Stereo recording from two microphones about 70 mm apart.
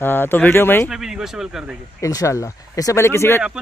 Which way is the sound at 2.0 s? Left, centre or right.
Left.